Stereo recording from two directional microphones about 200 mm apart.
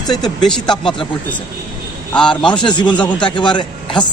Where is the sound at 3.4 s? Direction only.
25° left (ahead or behind).